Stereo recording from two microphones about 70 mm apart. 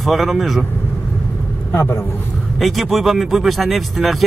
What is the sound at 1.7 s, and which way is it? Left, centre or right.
Speech, left.